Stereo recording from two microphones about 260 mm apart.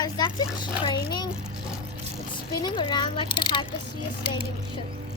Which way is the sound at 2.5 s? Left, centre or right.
Centre.